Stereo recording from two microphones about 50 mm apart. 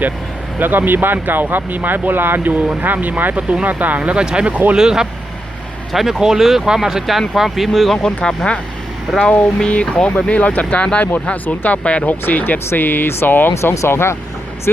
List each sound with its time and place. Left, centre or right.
0.6 s speech: right
4.1 s speech: centre
4.8 s speech: centre
5.9 s speech: centre
9.1 s speech: centre
9.6 s speech: left
12.3 s speech: left
13.7 s speech: left